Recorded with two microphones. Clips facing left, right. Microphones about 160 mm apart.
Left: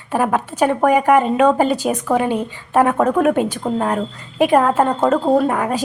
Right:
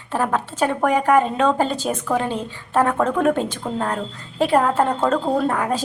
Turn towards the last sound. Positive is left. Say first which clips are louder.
# left 4 dB
turn(degrees=15)  # may be behind; listen again after turning